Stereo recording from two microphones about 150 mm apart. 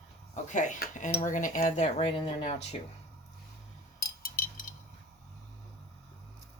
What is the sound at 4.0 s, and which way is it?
Cutlery, 85° left.